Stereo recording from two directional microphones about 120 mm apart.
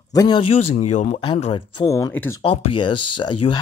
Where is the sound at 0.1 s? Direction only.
30° left (ahead or behind).